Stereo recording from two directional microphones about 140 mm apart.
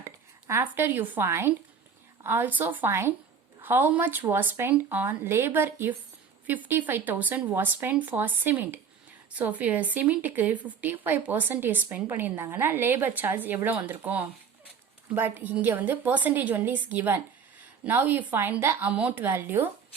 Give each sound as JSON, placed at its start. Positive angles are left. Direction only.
{"t": 0.0, "sound": "speech", "side_deg": -20}